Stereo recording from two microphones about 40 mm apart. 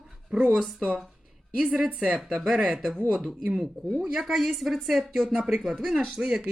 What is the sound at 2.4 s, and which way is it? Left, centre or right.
Speech, centre.